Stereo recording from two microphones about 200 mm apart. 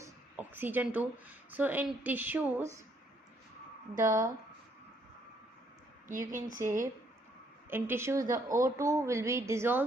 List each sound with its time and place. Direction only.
0.0 s a woman's voice: 10° right (ahead or behind)
3.9 s speech: 15° right (ahead or behind)
6.1 s speech: 40° right (ahead or behind)
7.7 s speech: 10° right (ahead or behind)